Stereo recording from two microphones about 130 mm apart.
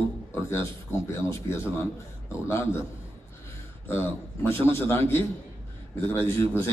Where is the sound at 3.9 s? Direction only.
15° left (ahead or behind).